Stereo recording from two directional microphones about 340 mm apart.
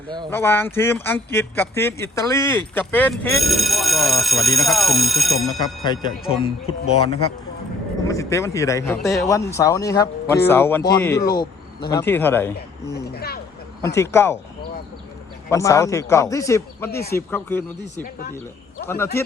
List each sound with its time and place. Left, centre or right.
0.3 s speech: centre
5.5 s speech: centre
12.9 s speech: left
13.8 s speech: centre
15.4 s speech: centre
16.9 s speech: left
17.2 s speech: centre
18.0 s speech: left
18.9 s speech: centre